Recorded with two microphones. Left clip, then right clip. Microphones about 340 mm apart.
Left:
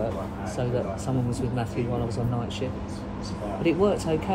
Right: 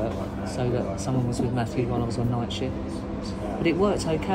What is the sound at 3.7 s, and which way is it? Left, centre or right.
Speech, centre.